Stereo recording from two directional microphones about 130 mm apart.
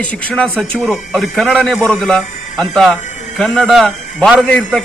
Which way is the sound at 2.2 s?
70° left (ahead or behind).